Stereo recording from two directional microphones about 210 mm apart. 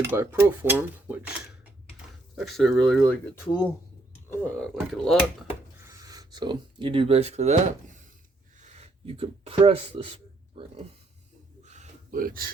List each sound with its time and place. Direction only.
0.0 s speech: 10° right (ahead or behind)
2.3 s speech: centre (ahead or behind)
4.3 s speech: 5° left (ahead or behind)
5.8 s speech: 15° right (ahead or behind)
11.6 s a sound: 35° right (ahead or behind)